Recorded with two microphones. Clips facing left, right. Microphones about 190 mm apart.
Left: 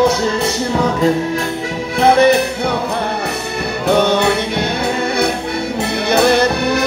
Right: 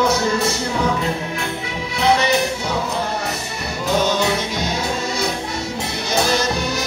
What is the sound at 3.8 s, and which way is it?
Music, 60° left (ahead or behind).